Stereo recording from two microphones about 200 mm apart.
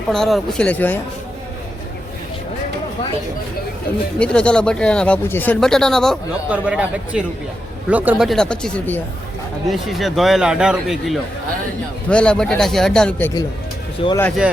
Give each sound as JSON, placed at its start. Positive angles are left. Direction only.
{"t": 0.1, "sound": "speech", "side_deg": 0}
{"t": 4.2, "sound": "speech", "side_deg": 5}
{"t": 14.0, "sound": "speech", "side_deg": 30}